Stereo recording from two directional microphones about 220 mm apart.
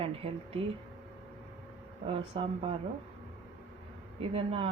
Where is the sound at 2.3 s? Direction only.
25° right (ahead or behind).